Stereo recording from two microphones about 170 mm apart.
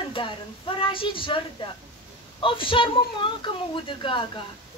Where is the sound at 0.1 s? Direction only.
30° left (ahead or behind).